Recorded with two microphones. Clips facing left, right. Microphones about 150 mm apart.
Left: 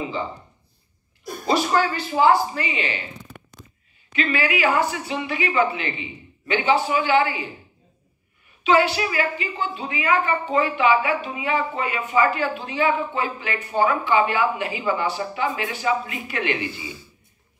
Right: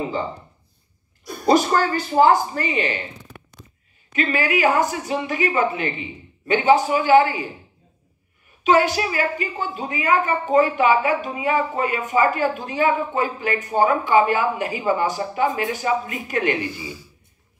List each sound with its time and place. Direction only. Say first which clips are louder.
1.4 s a woman's voice: right 3 dB; 45° right (ahead or behind)
4.1 s a woman's voice: right 2 dB; 45° right (ahead or behind)
8.6 s a woman's voice: right 1 dB; 45° right (ahead or behind)
16.7 s speech: right 2 dB; 10° right (ahead or behind)